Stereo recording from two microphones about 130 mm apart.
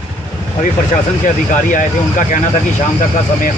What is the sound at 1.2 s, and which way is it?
Speech, 80° left.